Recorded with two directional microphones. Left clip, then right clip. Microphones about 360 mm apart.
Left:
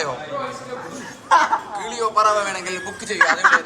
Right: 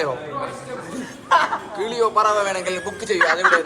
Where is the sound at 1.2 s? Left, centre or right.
Centre.